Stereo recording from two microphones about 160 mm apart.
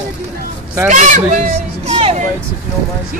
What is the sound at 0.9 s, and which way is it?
Speech, 50° right (ahead or behind).